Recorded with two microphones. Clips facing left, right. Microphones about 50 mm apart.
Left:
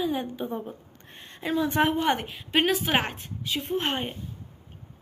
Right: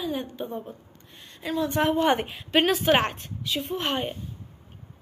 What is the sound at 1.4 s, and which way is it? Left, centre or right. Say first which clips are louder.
Speech: left 1 dB; left.